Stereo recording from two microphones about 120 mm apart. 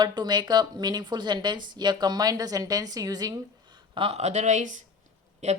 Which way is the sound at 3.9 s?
55° right (ahead or behind).